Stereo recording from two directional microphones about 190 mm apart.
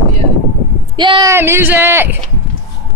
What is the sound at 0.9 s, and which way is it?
Speech, 25° right (ahead or behind).